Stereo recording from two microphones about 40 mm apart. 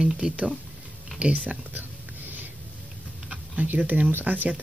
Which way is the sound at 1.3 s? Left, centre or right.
Right.